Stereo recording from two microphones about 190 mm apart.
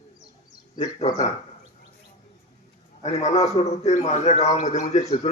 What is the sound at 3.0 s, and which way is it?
A man's voice, 35° left (ahead or behind).